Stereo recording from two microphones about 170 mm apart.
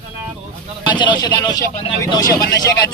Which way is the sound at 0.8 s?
25° left (ahead or behind).